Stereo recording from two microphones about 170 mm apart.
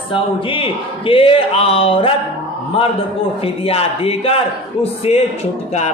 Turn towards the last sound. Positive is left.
turn(degrees=40)  # may be behind; listen again after turning